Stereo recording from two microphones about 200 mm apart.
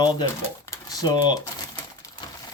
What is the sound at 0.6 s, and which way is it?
Typing, 20° left (ahead or behind).